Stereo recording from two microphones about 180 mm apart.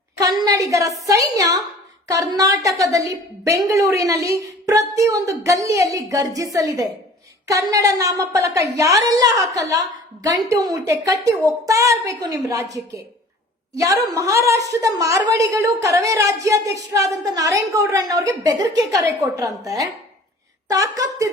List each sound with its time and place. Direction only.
0.2 s a woman's voice: 20° right (ahead or behind)
13.7 s a woman's voice: 15° right (ahead or behind)